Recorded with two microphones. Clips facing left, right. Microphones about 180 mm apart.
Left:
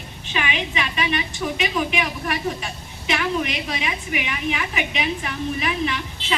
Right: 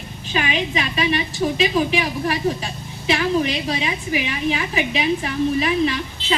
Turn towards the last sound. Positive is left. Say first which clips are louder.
# right 4 dB
turn(degrees=-35)  # may be behind; listen again after turning